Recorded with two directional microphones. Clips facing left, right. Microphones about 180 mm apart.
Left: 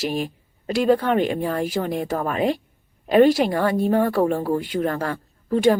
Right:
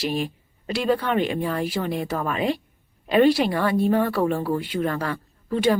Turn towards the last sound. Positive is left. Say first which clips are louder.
# left 4 dB
turn(degrees=40)  # may be behind; listen again after turning